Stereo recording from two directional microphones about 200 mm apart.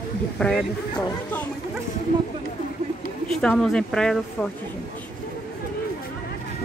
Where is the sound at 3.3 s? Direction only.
5° left (ahead or behind).